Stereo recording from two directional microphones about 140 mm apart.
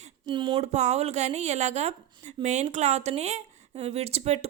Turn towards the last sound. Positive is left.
turn(degrees=-50)  # may be behind; listen again after turning